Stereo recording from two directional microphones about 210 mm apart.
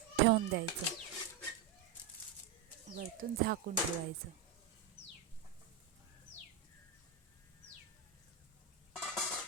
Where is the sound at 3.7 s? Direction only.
40° right (ahead or behind).